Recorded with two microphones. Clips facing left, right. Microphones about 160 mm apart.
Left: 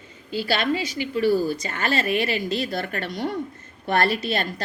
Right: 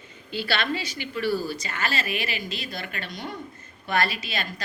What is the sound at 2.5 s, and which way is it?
A woman's voice, 65° left (ahead or behind).